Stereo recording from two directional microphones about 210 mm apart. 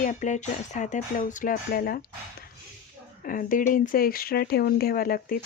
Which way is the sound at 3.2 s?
40° left (ahead or behind).